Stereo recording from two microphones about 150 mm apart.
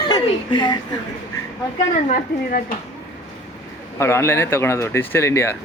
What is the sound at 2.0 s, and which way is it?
Speech, 75° left (ahead or behind).